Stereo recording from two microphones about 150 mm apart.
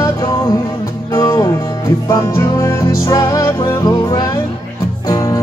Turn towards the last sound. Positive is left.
turn(degrees=25)  # may be behind; listen again after turning